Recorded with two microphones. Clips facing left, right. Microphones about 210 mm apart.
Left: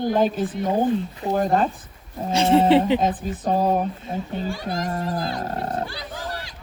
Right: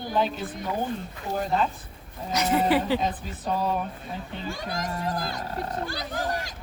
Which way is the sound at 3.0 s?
45° left (ahead or behind).